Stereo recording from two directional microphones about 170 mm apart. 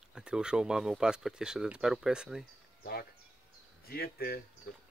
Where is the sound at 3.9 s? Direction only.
65° left (ahead or behind).